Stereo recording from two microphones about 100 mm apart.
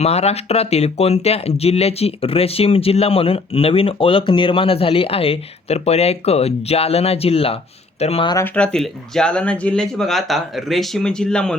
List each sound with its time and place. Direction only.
0.0 s speech: 90° left
8.5 s speech: 10° left (ahead or behind)